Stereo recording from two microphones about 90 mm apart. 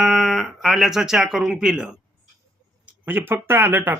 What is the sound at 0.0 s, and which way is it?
Speech, centre (ahead or behind).